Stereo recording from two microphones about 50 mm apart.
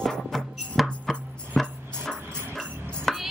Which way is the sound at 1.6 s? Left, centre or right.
Centre.